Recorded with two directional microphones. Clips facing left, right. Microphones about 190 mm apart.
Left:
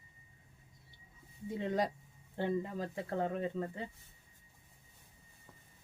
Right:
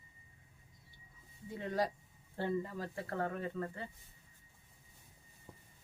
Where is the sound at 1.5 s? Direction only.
20° left (ahead or behind).